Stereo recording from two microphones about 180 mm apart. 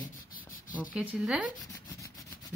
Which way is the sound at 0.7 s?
10° right (ahead or behind).